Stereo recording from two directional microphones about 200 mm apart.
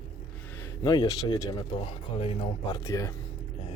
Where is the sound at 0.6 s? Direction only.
20° left (ahead or behind).